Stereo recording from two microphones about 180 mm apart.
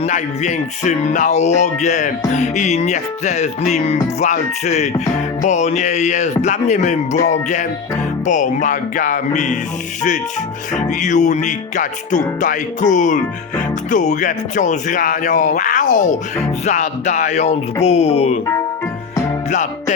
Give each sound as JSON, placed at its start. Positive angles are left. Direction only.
{"t": 0.0, "sound": "music", "side_deg": 40}
{"t": 10.8, "sound": "music", "side_deg": 45}